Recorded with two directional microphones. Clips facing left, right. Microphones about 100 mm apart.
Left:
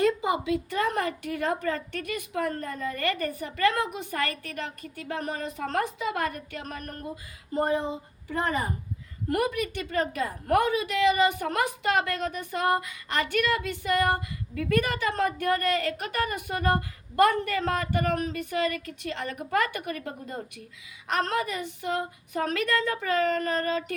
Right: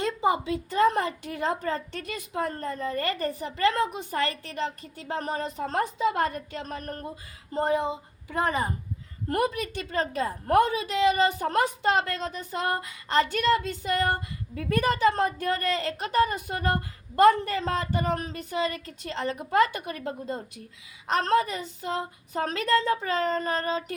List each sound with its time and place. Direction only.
0.0 s a sound: 30° right (ahead or behind)
0.4 s a woman's voice: 30° right (ahead or behind)
9.3 s female singing: 30° right (ahead or behind)
17.2 s a woman's voice: 30° right (ahead or behind)
21.1 s female singing: 35° right (ahead or behind)